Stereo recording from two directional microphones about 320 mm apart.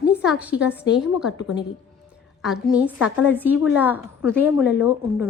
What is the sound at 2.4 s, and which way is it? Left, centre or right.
A woman's voice, centre.